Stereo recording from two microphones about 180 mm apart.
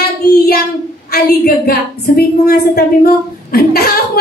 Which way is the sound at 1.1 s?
60° left (ahead or behind).